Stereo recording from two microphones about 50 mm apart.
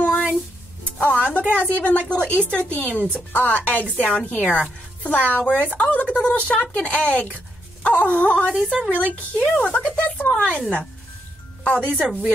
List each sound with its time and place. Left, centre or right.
0.0 s music: left
1.5 s a woman's voice: left
8.6 s a woman's voice: centre
11.6 s speech: left